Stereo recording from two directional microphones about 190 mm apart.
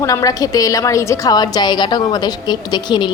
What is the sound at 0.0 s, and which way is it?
A woman's voice, 15° left (ahead or behind).